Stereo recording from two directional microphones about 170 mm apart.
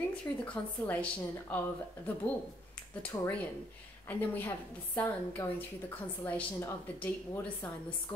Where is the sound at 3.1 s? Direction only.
15° left (ahead or behind).